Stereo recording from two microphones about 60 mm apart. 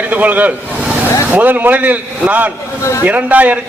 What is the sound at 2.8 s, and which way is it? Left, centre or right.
Speech, left.